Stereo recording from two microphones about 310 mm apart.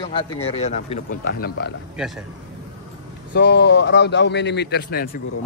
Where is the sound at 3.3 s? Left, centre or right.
Left.